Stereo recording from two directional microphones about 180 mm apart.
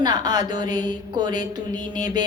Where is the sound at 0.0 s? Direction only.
25° right (ahead or behind).